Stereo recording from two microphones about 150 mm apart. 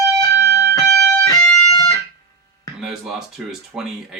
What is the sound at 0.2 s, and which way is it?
Music, 20° left (ahead or behind).